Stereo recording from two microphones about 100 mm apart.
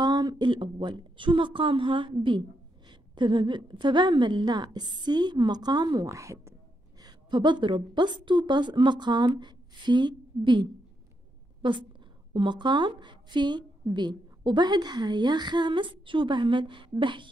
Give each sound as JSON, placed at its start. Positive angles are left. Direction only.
{"t": 0.0, "sound": "a woman's voice", "side_deg": -45}
{"t": 6.0, "sound": "speech", "side_deg": -30}
{"t": 7.0, "sound": "a woman's voice", "side_deg": -45}